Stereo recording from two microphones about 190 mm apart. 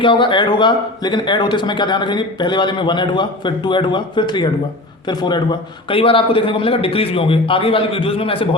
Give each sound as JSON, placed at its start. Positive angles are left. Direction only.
{"t": 0.0, "sound": "speech", "side_deg": 25}